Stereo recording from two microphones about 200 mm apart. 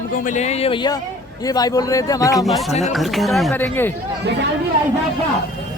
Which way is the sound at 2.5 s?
Centre (ahead or behind).